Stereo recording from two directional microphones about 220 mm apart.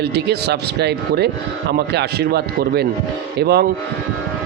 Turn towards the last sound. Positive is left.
turn(degrees=-45)  # may be behind; listen again after turning